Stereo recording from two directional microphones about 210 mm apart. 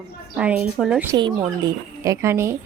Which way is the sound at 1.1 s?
20° right (ahead or behind).